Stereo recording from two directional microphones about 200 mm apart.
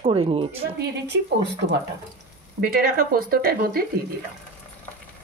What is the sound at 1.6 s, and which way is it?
Speech, 55° right (ahead or behind).